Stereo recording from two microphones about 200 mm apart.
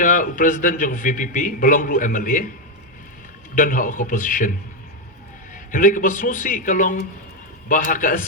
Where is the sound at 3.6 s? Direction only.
45° left (ahead or behind).